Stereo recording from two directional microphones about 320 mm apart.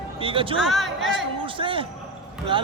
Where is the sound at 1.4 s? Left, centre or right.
Centre.